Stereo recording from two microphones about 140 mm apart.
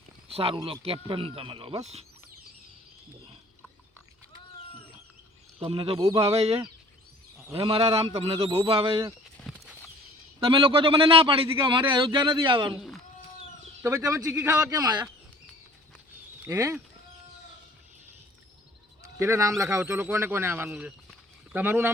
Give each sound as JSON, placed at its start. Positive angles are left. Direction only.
{"t": 0.3, "sound": "speech", "side_deg": -45}
{"t": 5.5, "sound": "a man's voice", "side_deg": -40}
{"t": 9.4, "sound": "horse", "side_deg": 5}
{"t": 10.4, "sound": "a man's voice", "side_deg": -40}
{"t": 12.7, "sound": "speech", "side_deg": 0}
{"t": 14.1, "sound": "a man's voice", "side_deg": -20}
{"t": 16.4, "sound": "speech", "side_deg": -20}
{"t": 19.0, "sound": "speech", "side_deg": -20}